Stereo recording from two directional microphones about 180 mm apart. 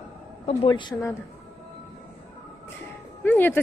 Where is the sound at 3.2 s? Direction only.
10° left (ahead or behind).